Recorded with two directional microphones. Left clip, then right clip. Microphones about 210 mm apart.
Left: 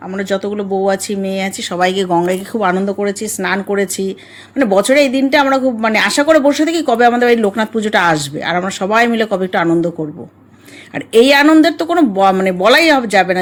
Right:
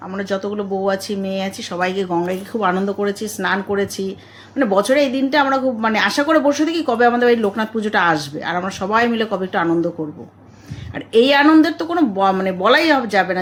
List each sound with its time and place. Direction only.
0.1 s a woman's voice: 35° left (ahead or behind)
10.9 s a woman's voice: 40° left (ahead or behind)